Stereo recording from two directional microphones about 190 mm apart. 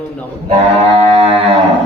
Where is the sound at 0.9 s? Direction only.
30° right (ahead or behind).